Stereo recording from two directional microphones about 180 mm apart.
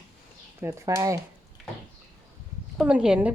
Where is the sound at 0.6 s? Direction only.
15° right (ahead or behind).